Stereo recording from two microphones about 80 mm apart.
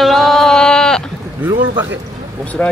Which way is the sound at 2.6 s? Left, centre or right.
Centre.